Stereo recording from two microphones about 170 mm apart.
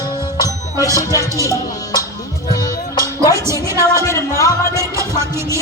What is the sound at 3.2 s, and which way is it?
Music, 15° right (ahead or behind).